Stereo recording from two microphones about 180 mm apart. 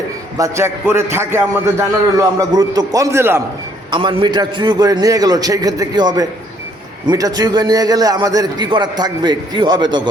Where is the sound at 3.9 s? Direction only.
25° right (ahead or behind).